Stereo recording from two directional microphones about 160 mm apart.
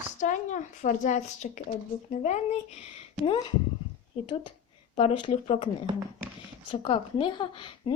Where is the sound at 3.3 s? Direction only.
35° left (ahead or behind).